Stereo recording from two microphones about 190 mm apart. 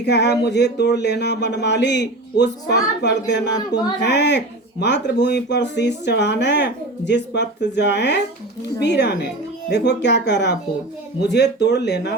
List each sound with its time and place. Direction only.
0.0 s speech: 60° left (ahead or behind)